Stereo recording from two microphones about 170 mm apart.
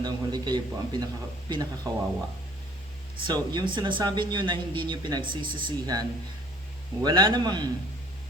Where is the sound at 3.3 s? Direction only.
25° right (ahead or behind).